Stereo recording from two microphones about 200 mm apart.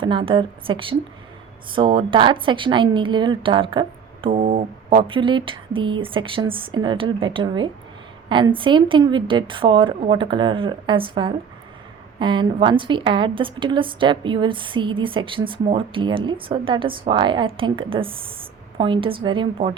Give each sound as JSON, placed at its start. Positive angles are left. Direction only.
{"t": 0.0, "sound": "a woman's voice", "side_deg": -25}